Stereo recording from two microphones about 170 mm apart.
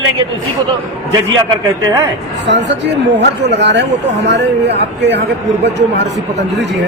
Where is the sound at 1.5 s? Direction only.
20° right (ahead or behind).